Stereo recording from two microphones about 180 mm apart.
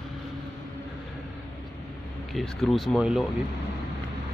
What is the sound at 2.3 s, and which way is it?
Speech, centre (ahead or behind).